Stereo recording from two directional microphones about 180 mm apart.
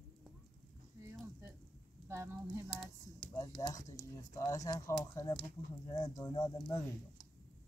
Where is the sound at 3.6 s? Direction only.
20° left (ahead or behind).